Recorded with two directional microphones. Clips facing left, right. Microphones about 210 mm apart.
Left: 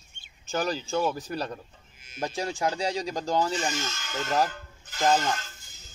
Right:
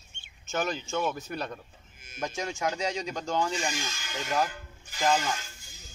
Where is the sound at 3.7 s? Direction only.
10° right (ahead or behind).